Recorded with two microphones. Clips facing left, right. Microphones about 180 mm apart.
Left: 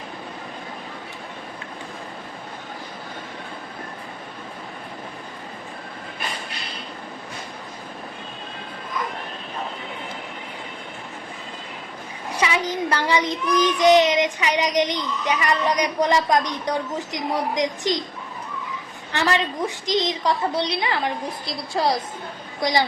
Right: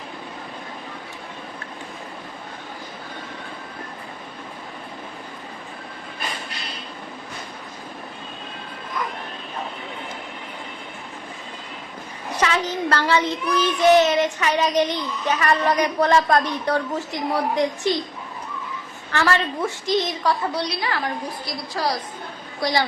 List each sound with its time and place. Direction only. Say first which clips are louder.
12.3 s a child's voice: right 1 dB; 10° left (ahead or behind)
19.1 s a woman's voice: right 1 dB; 20° left (ahead or behind)